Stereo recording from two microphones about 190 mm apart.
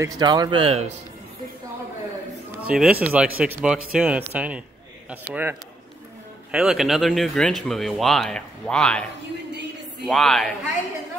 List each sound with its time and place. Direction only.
0.0 s speech: 20° right (ahead or behind)
2.6 s speech: 5° right (ahead or behind)
10.0 s speech: centre (ahead or behind)